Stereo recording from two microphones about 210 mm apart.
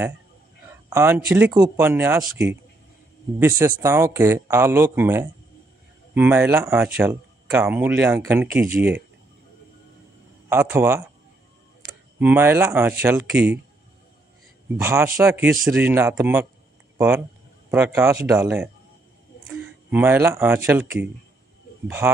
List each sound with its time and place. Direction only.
0.7 s a sound: 10° right (ahead or behind)
1.3 s speech: 10° right (ahead or behind)
10.5 s speech: 10° right (ahead or behind)
12.2 s speech: 10° right (ahead or behind)
14.8 s speech: 10° right (ahead or behind)
17.6 s speech: 10° right (ahead or behind)
19.9 s speech: 10° right (ahead or behind)